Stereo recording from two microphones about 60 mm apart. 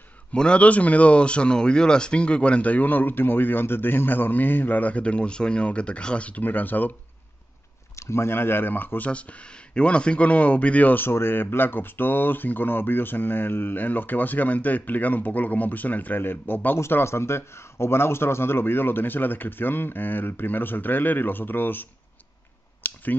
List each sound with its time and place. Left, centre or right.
0.3 s speech: centre
7.9 s speech: left
11.1 s speech: left
16.7 s speech: left
22.8 s a sound: left